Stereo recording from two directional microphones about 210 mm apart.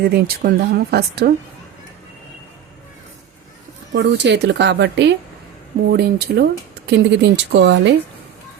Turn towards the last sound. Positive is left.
turn(degrees=-55)  # may be behind; listen again after turning